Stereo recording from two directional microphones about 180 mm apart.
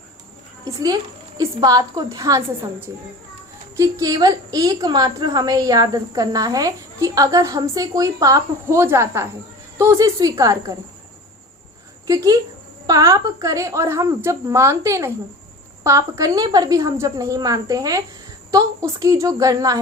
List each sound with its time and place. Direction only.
0.6 s a child's voice: 20° right (ahead or behind)
12.0 s a woman's voice: 20° right (ahead or behind)